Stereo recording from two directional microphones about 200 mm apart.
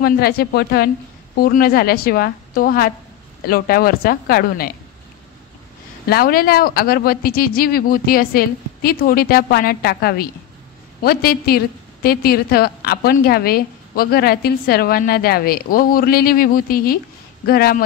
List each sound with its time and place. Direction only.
0.0 s a woman's voice: 50° left (ahead or behind)
6.0 s a woman's voice: 50° left (ahead or behind)